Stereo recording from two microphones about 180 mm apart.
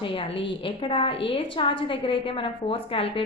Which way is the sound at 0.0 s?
30° left (ahead or behind).